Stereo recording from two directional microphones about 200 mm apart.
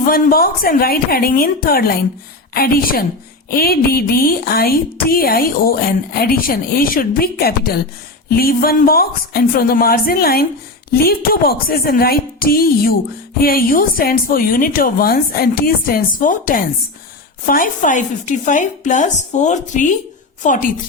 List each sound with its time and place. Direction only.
0.0 s speech: 45° left (ahead or behind)